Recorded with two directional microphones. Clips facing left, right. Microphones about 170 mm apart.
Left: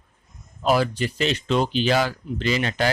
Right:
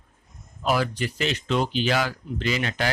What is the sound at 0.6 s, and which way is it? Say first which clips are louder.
Speech: left 3 dB; 30° left (ahead or behind).